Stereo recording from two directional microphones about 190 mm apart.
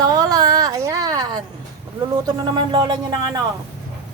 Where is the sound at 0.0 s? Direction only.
20° right (ahead or behind).